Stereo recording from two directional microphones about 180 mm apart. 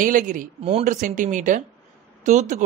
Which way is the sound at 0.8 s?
45° right (ahead or behind).